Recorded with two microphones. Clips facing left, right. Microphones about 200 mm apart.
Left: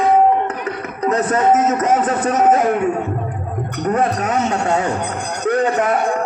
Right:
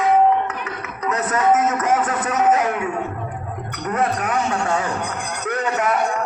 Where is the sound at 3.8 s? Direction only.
30° left (ahead or behind).